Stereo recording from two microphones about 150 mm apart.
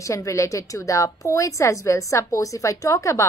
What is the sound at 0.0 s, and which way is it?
A woman's voice, 20° left (ahead or behind).